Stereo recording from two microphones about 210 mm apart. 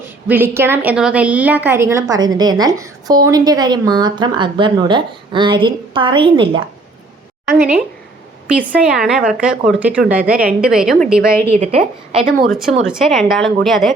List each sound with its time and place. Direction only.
0.3 s a woman's voice: 10° right (ahead or behind)
7.4 s speech: 10° right (ahead or behind)
11.6 s a woman's voice: 30° right (ahead or behind)
12.5 s speech: centre (ahead or behind)